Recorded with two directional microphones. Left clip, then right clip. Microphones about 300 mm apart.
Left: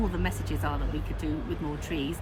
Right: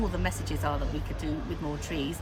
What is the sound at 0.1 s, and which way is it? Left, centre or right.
Speech, centre.